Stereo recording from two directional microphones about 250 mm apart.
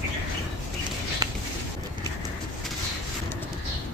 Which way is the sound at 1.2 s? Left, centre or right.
Centre.